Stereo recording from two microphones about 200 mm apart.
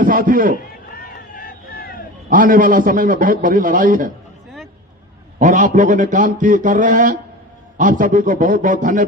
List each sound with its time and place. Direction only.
0.0 s a man's voice: 45° right (ahead or behind)
0.9 s vehicle: 45° left (ahead or behind)
2.3 s a man's voice: 45° right (ahead or behind)
5.4 s a man's voice: 40° right (ahead or behind)